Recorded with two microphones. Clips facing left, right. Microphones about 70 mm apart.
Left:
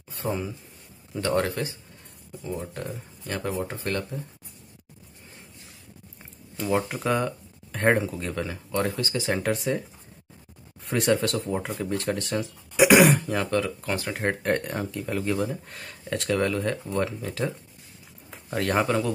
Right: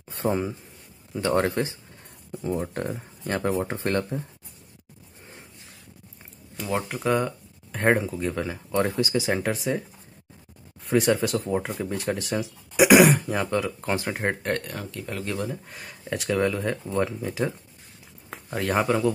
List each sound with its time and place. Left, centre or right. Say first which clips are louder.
0.1 s speech: right 4 dB; right
6.9 s speech: right 1 dB; centre
8.9 s speech: right 3 dB; centre
13.7 s speech: right 2 dB; right
14.5 s speech: left 3 dB; left
15.0 s speech: left 3 dB; centre
15.4 s speech: left 2 dB; centre